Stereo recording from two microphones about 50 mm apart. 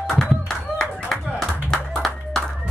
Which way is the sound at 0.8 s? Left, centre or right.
Centre.